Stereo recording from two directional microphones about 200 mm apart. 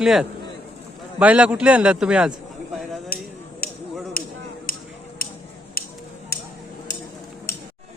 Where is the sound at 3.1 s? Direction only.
45° left (ahead or behind).